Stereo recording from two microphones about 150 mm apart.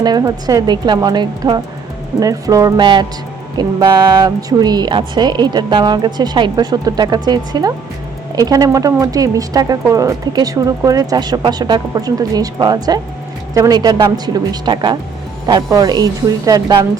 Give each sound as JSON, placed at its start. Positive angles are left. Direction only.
{"t": 0.0, "sound": "speech", "side_deg": -25}